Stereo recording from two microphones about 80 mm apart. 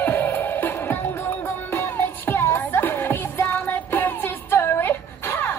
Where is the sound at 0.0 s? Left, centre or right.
Left.